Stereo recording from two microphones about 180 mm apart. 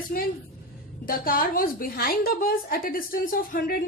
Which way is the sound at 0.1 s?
60° left (ahead or behind).